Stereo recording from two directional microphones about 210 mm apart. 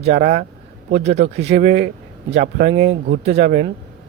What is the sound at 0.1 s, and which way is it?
Speech, 50° right (ahead or behind).